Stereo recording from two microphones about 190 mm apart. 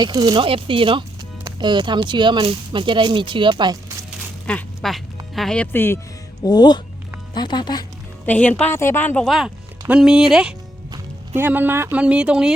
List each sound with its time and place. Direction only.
0.0 s speech: 20° right (ahead or behind)
4.4 s speech: 5° left (ahead or behind)
6.4 s speech: 20° left (ahead or behind)
8.3 s speech: 5° left (ahead or behind)